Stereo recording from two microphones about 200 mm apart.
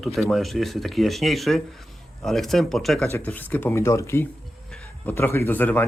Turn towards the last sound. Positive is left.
turn(degrees=10)  # may be behind; listen again after turning